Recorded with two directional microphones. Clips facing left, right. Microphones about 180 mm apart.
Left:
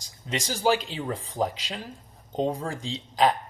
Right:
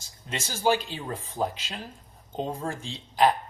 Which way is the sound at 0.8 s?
90° left.